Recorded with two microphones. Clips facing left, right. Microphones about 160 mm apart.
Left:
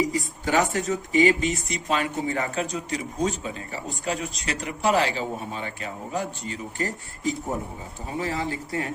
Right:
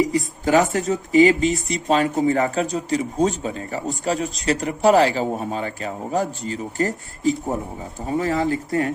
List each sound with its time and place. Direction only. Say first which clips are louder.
0.4 s speech: right 5 dB; 35° right (ahead or behind)